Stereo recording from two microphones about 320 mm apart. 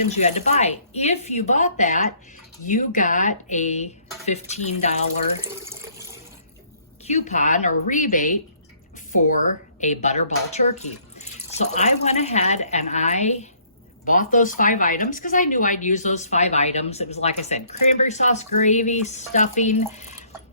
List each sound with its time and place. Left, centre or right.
0.1 s a woman's voice: left
7.0 s a woman's voice: left